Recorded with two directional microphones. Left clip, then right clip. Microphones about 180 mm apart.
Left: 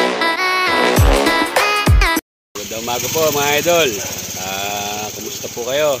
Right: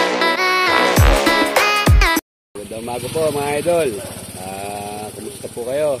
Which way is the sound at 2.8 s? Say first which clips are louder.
Left 3 dB; 25° left (ahead or behind).